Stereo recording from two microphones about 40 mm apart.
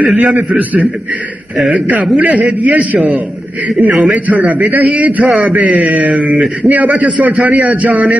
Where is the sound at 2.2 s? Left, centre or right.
Right.